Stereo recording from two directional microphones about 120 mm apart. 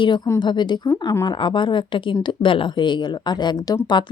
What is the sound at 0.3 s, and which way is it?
A woman's voice, 40° left (ahead or behind).